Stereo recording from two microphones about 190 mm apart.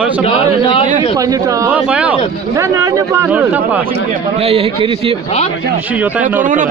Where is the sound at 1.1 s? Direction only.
20° right (ahead or behind).